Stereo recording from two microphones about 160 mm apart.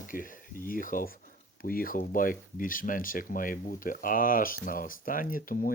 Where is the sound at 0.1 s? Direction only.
60° left (ahead or behind).